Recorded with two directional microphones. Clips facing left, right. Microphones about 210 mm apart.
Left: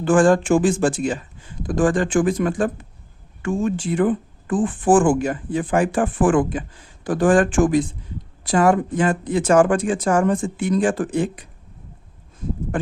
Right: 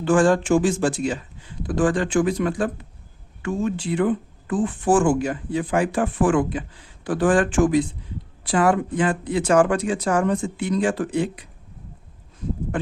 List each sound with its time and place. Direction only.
0.0 s speech: 50° left (ahead or behind)